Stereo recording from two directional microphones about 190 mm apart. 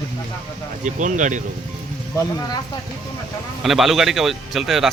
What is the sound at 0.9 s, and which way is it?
Speech, 40° right (ahead or behind).